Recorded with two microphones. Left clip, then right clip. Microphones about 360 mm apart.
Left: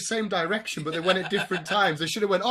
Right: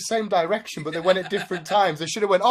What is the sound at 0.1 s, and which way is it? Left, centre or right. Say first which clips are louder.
Speech: right 5 dB; centre.